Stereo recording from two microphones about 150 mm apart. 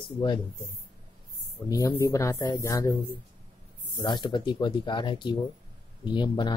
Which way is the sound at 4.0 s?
30° left (ahead or behind).